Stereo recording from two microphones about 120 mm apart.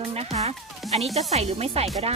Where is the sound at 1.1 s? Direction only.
65° right (ahead or behind).